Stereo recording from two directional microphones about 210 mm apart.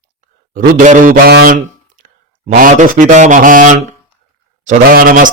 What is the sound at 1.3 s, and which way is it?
Speech, 50° right (ahead or behind).